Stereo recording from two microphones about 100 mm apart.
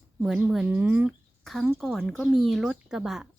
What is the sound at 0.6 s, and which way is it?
Speech, 15° right (ahead or behind).